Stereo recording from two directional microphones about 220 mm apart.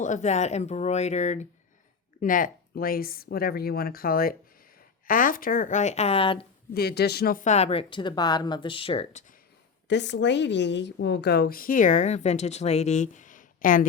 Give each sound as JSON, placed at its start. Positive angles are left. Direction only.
{"t": 0.0, "sound": "a woman's voice", "side_deg": 35}
{"t": 6.7, "sound": "speech", "side_deg": 45}
{"t": 9.9, "sound": "a woman's voice", "side_deg": 55}